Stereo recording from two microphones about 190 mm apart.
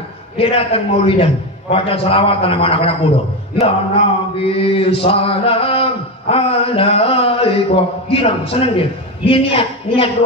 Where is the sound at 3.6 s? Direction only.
30° left (ahead or behind).